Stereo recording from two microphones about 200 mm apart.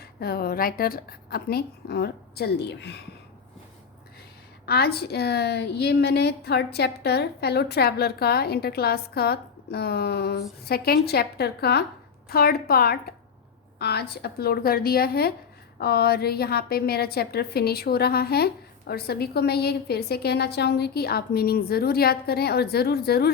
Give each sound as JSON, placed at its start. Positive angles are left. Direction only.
{"t": 0.0, "sound": "a woman's voice", "side_deg": 50}
{"t": 4.6, "sound": "a woman's voice", "side_deg": 55}